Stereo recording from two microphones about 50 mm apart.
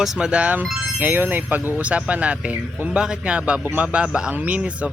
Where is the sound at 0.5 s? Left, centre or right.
Right.